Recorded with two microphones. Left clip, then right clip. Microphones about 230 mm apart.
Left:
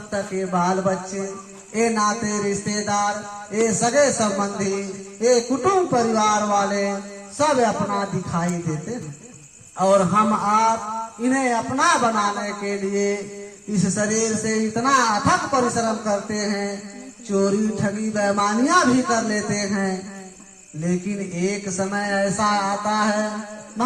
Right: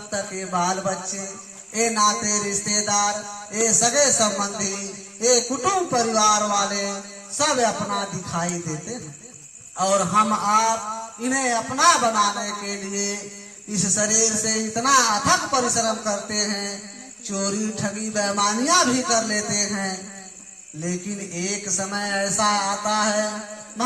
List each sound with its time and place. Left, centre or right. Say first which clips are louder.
0.1 s speech: left 3 dB; right
13.8 s a man's voice: right 1 dB; right
14.1 s speech: even; right
21.3 s speech: left 2 dB; right